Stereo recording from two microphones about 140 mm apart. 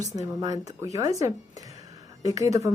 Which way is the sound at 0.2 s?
25° right (ahead or behind).